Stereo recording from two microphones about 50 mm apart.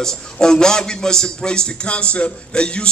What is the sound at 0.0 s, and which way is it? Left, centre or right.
A man's voice, centre.